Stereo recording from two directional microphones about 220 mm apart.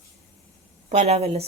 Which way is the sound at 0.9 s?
30° right (ahead or behind).